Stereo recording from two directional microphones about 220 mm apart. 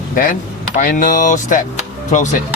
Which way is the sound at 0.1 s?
35° left (ahead or behind).